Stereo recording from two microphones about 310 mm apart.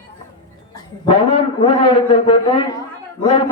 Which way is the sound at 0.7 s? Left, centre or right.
Centre.